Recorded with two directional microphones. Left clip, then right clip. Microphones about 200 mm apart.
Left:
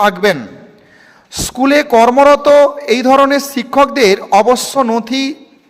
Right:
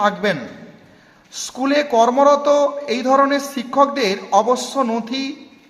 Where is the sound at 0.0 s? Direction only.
45° left (ahead or behind).